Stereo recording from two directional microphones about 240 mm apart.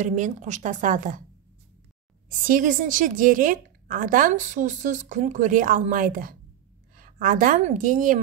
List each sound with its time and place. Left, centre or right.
0.0 s a woman's voice: right
2.2 s a woman's voice: right